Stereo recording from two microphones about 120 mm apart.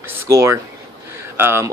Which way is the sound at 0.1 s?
20° right (ahead or behind).